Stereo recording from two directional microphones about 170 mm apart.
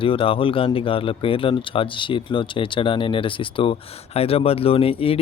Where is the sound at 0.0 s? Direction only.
30° left (ahead or behind).